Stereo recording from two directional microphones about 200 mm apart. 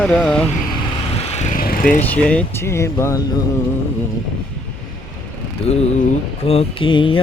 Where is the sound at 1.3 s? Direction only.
35° left (ahead or behind).